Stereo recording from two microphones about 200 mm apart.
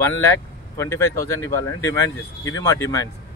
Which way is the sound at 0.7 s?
15° left (ahead or behind).